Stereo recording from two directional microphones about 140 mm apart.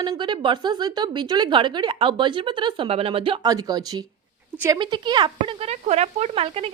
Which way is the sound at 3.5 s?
25° right (ahead or behind).